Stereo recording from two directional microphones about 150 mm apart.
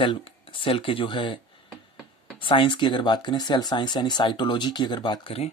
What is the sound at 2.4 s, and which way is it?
Speech, 35° left (ahead or behind).